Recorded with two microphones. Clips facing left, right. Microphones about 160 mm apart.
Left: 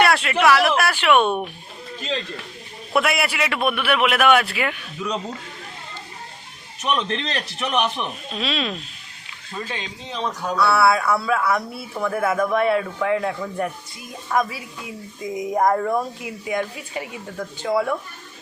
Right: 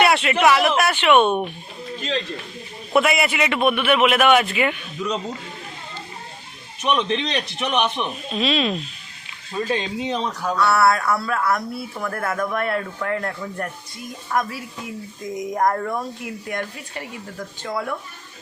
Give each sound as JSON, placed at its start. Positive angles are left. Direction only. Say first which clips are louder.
{"t": 0.0, "sound": "speech", "louder": "right 1 dB", "side_deg": -5}
{"t": 2.9, "sound": "speech", "louder": "right 2 dB", "side_deg": 0}
{"t": 6.8, "sound": "speech", "louder": "right 2 dB", "side_deg": 0}
{"t": 9.6, "sound": "speech", "louder": "right 11 dB", "side_deg": -35}
{"t": 10.6, "sound": "speech", "louder": "even", "side_deg": 5}